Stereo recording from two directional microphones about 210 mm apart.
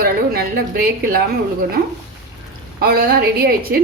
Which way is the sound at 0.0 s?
45° right (ahead or behind).